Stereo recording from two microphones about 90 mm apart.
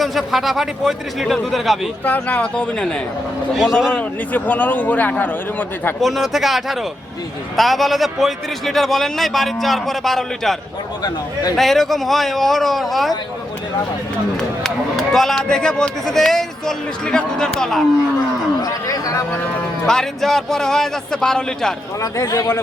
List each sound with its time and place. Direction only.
0.0 s a man's voice: centre (ahead or behind)
2.0 s speech: 15° left (ahead or behind)
3.5 s a man's voice: 5° right (ahead or behind)
3.9 s a man's voice: 20° left (ahead or behind)
6.0 s a man's voice: centre (ahead or behind)
14.6 s a man's voice: 5° left (ahead or behind)
18.6 s speech: 40° left (ahead or behind)
19.9 s a man's voice: 5° left (ahead or behind)
22.0 s speech: 40° left (ahead or behind)